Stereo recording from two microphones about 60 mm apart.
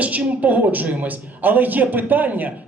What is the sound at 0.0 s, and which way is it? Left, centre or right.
A man's voice, right.